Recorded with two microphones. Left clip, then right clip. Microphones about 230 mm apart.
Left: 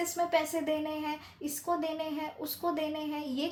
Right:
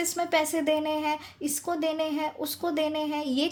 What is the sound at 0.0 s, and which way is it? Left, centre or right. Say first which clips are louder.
Speech: right 3 dB; right.